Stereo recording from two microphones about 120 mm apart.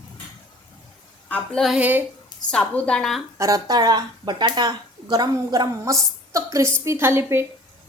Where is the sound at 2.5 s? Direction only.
10° left (ahead or behind).